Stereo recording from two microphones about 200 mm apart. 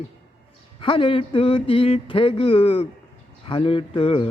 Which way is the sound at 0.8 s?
25° left (ahead or behind).